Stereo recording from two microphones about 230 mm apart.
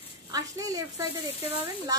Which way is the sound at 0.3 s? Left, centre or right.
Centre.